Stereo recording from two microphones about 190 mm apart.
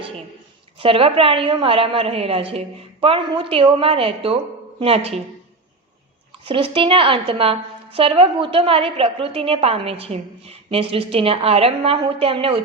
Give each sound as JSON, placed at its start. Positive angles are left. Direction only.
{"t": 0.8, "sound": "a woman's voice", "side_deg": -30}
{"t": 6.5, "sound": "a woman's voice", "side_deg": -25}